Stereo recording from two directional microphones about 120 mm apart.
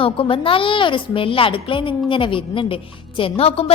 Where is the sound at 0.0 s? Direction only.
50° left (ahead or behind).